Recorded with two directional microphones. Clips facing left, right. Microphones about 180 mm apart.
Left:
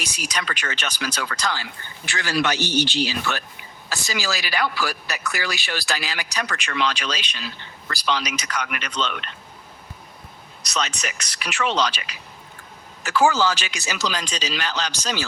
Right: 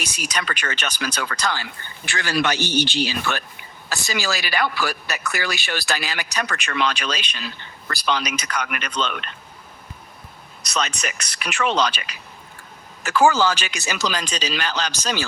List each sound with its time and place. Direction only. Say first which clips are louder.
0.0 s a man's voice: right 1 dB; 55° right (ahead or behind)
10.6 s speech: right 2 dB; 55° right (ahead or behind)